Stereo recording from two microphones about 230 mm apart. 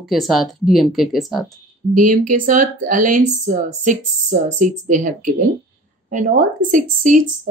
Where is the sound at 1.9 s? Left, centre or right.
Right.